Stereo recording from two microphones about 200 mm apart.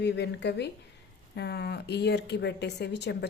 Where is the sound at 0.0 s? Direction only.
60° left (ahead or behind).